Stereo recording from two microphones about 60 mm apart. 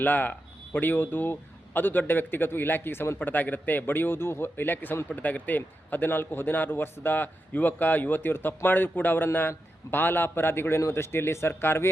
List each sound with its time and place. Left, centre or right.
0.0 s a man's voice: left